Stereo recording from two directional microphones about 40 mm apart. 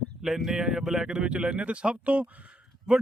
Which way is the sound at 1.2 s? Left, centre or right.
Right.